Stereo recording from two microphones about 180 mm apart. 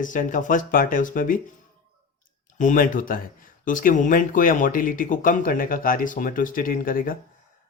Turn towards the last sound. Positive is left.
turn(degrees=50)  # may be behind; listen again after turning